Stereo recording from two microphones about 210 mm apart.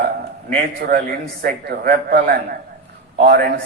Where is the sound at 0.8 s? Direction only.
45° right (ahead or behind).